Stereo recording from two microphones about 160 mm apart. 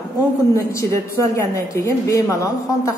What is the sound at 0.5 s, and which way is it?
A woman's voice, 20° left (ahead or behind).